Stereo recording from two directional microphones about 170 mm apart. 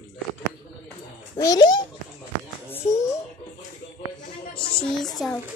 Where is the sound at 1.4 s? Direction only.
20° left (ahead or behind).